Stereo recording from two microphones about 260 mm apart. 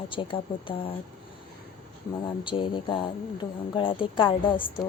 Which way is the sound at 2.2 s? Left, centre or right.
Centre.